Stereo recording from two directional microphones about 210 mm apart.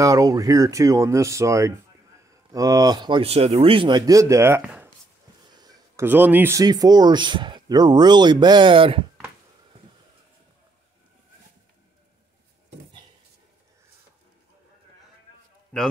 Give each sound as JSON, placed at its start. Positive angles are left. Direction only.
{"t": 0.0, "sound": "speech", "side_deg": -15}
{"t": 15.7, "sound": "a man's voice", "side_deg": 5}